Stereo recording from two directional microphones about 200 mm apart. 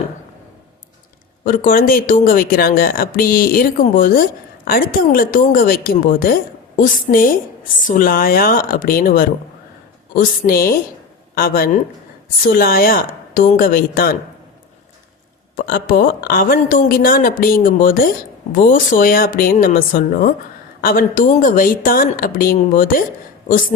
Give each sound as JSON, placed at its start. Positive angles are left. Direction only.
{"t": 1.5, "sound": "speech", "side_deg": 45}
{"t": 15.5, "sound": "speech", "side_deg": 45}